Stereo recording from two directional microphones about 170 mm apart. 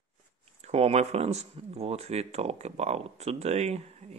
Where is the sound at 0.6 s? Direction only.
40° right (ahead or behind).